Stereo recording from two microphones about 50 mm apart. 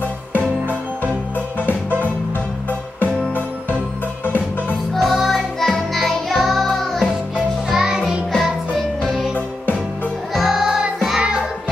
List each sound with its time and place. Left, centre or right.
0.3 s music: left
4.9 s music: centre
7.7 s music: centre
8.3 s music: centre
10.3 s music: centre